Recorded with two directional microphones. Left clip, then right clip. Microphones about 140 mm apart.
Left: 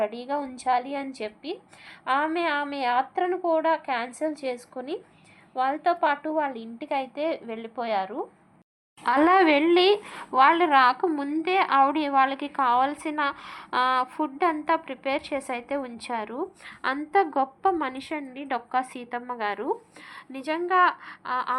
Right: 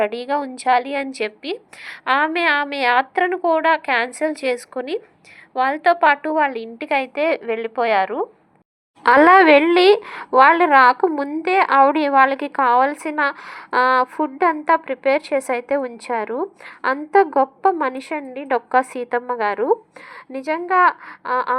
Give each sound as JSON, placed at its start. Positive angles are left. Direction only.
{"t": 0.0, "sound": "a woman's voice", "side_deg": -50}
{"t": 9.0, "sound": "a woman's voice", "side_deg": -50}